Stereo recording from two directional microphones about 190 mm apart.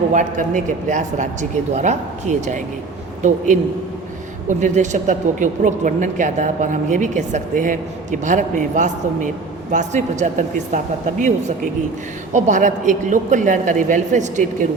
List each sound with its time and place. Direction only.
0.1 s speech: 40° right (ahead or behind)